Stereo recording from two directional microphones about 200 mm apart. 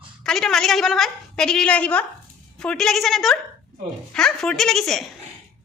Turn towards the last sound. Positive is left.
turn(degrees=0)  # may be behind; listen again after turning